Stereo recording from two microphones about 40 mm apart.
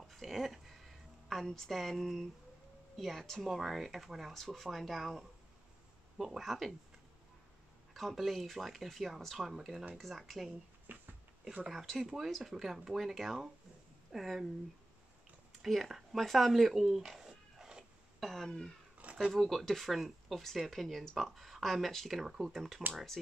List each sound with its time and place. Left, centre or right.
0.0 s a sound: centre
1.5 s speech: centre
4.3 s speech: centre
7.9 s speech: centre
10.9 s a sound: right
11.7 s speech: centre
12.0 s speech: centre
15.6 s speech: centre
18.2 s throat clearing: centre
19.1 s speech: centre